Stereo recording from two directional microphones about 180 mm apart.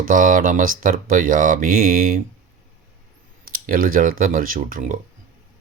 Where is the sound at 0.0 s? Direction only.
50° right (ahead or behind).